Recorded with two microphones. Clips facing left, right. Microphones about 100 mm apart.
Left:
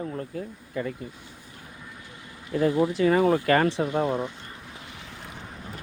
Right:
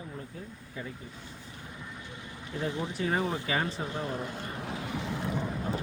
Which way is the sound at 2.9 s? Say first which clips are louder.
Left 7 dB; 90° left.